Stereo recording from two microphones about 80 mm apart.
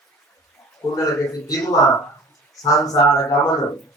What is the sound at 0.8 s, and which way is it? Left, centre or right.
Speech, left.